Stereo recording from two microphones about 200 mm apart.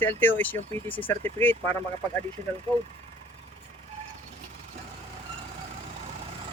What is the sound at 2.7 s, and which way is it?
Speech, 25° right (ahead or behind).